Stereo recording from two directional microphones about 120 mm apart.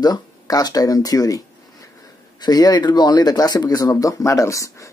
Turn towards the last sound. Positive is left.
turn(degrees=25)  # may be behind; listen again after turning